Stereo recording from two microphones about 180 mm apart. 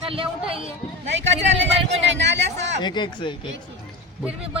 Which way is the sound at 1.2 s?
90° right.